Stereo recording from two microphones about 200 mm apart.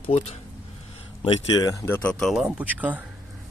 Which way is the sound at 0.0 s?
35° left (ahead or behind).